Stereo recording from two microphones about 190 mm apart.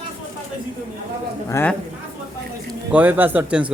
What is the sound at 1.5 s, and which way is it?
Speech, 10° left (ahead or behind).